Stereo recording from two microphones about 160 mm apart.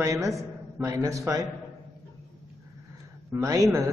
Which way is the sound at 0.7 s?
20° right (ahead or behind).